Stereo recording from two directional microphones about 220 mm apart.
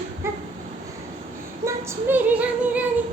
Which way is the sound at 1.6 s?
10° right (ahead or behind).